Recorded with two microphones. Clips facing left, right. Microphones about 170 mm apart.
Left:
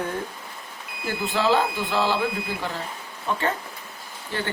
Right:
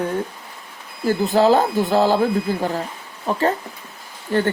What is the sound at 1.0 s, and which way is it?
Speech, 40° right (ahead or behind).